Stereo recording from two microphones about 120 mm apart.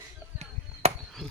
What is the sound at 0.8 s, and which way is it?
Chop, 60° right (ahead or behind).